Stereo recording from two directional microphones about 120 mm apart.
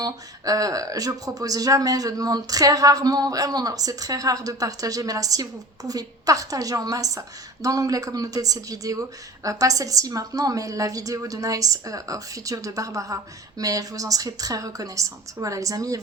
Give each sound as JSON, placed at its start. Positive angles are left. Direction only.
{"t": 0.0, "sound": "a woman's voice", "side_deg": -30}